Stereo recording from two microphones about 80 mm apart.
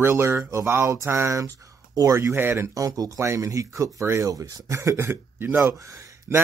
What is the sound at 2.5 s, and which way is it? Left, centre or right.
Speech, right.